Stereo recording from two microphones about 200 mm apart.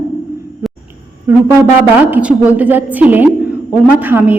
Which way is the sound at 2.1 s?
5° right (ahead or behind).